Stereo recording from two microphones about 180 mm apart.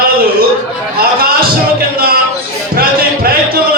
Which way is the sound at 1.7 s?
60° right (ahead or behind).